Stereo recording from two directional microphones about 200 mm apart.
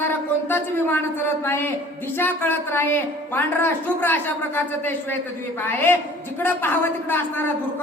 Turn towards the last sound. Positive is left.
turn(degrees=10)  # may be behind; listen again after turning